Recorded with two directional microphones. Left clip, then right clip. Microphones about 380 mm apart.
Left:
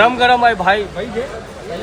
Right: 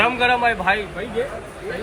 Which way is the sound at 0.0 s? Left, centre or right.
Left.